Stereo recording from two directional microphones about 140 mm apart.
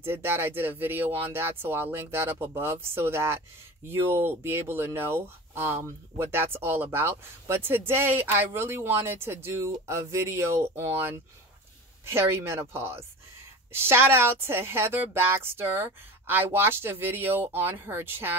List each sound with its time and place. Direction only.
0.0 s speech: 15° right (ahead or behind)